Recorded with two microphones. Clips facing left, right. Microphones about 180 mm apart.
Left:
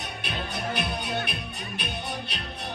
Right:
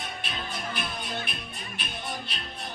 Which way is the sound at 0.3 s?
60° left (ahead or behind).